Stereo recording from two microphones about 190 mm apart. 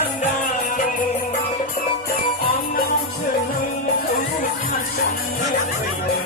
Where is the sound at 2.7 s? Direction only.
50° left (ahead or behind).